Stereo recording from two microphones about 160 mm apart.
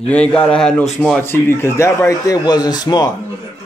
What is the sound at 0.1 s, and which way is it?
A man's voice, 5° left (ahead or behind).